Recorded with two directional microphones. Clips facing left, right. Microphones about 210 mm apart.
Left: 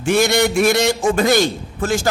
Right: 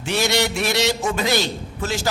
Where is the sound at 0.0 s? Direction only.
50° left (ahead or behind).